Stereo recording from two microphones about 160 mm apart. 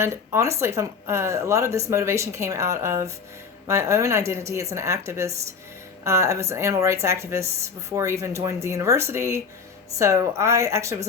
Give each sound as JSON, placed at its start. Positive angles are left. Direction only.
{"t": 0.0, "sound": "speech", "side_deg": -15}